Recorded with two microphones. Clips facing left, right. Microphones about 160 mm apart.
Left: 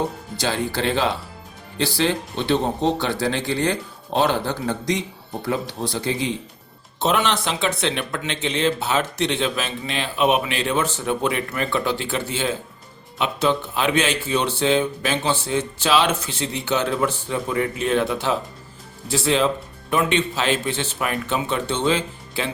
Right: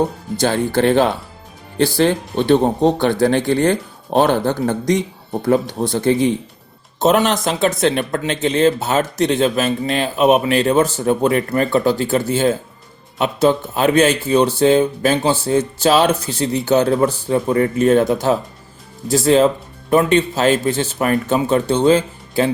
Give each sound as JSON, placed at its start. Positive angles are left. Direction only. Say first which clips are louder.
{"t": 0.3, "sound": "speech", "louder": "right 8 dB", "side_deg": -50}